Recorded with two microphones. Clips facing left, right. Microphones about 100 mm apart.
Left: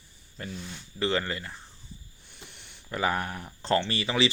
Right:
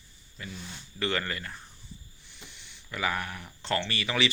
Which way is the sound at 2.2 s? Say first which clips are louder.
Left 1 dB; 50° left (ahead or behind).